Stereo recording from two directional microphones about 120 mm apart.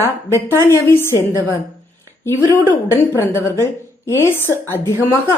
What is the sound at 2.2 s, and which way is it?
A woman's voice, 20° left (ahead or behind).